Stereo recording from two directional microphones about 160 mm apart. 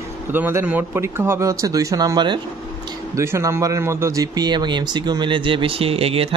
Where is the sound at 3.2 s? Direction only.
20° right (ahead or behind).